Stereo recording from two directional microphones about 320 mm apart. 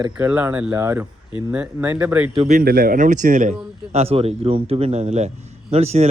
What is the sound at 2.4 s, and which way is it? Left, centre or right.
A man's voice, right.